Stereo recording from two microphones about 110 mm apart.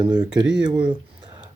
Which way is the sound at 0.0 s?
40° right (ahead or behind).